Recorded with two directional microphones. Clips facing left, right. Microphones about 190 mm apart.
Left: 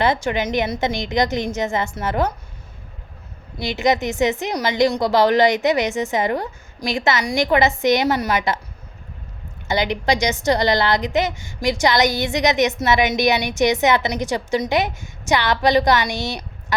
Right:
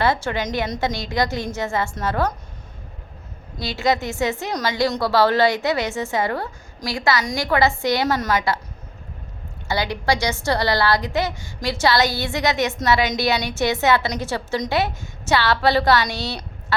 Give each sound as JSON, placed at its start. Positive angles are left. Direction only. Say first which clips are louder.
{"t": 0.0, "sound": "a woman's voice", "louder": "left 2 dB", "side_deg": 15}
{"t": 3.6, "sound": "a woman's voice", "louder": "left 2 dB", "side_deg": 20}
{"t": 9.6, "sound": "a woman's voice", "louder": "left 2 dB", "side_deg": 20}